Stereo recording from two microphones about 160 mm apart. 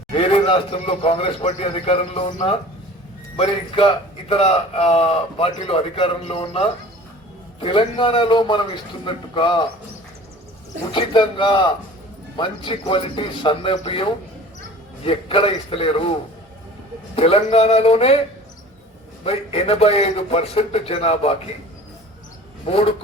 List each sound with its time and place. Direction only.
0.1 s a man's voice: 35° left (ahead or behind)
3.3 s a man's voice: 35° left (ahead or behind)
10.9 s a man's voice: 30° left (ahead or behind)
17.2 s a man's voice: 40° left (ahead or behind)
19.2 s a man's voice: 40° left (ahead or behind)
22.6 s a man's voice: 35° left (ahead or behind)